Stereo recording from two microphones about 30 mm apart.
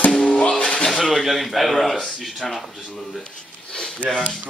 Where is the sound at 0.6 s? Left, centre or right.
Left.